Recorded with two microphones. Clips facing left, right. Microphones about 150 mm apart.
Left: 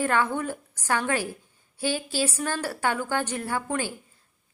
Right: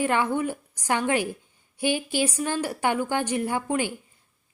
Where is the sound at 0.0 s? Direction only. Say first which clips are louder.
Right 1 dB; 15° right (ahead or behind).